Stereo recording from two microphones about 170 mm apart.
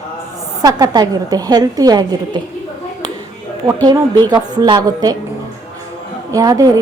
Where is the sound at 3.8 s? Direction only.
25° right (ahead or behind).